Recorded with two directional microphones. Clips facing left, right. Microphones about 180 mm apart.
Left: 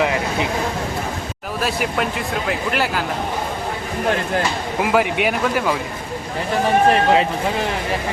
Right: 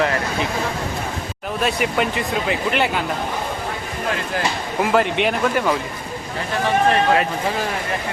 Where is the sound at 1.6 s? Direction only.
Centre (ahead or behind).